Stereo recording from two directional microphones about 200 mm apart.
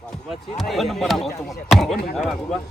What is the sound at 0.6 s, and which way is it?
A man's voice, centre (ahead or behind).